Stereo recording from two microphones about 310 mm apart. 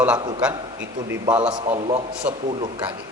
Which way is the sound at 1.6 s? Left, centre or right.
Centre.